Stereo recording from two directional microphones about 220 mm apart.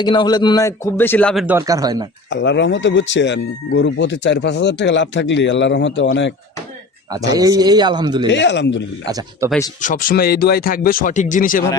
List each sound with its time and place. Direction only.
0.0 s a man's voice: 20° left (ahead or behind); by 1.5 s 5° left (ahead or behind)
1.5 s speech: 15° right (ahead or behind)
2.3 s speech: 50° left (ahead or behind)
7.3 s a man's voice: 15° right (ahead or behind)
8.3 s speech: 55° left (ahead or behind)
9.0 s speech: 15° right (ahead or behind)
9.8 s speech: 40° left (ahead or behind)